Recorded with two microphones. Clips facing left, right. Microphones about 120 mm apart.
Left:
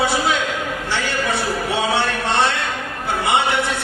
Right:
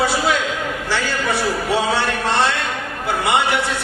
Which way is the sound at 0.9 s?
20° left (ahead or behind).